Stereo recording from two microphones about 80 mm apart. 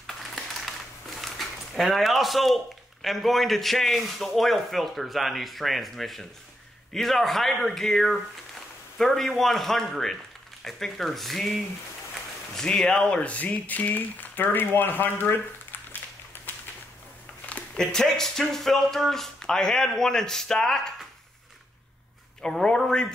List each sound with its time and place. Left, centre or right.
0.0 s crushing: centre
1.2 s speech: centre
12.5 s speech: centre; by 15.3 s left
17.5 s speech: centre
22.4 s speech: centre